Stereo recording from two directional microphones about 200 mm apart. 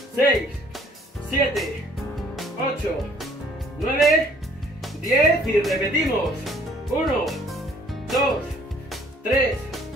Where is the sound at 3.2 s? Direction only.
Centre (ahead or behind).